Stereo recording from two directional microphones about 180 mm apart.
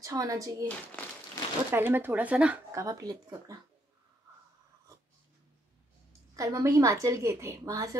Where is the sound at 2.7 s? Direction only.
20° right (ahead or behind).